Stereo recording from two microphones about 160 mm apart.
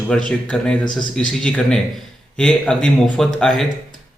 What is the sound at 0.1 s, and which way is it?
Speech, 5° left (ahead or behind).